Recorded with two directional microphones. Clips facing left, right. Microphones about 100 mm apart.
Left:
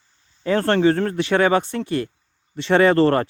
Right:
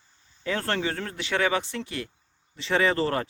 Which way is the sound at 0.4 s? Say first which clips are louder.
Left 11 dB; 45° left (ahead or behind).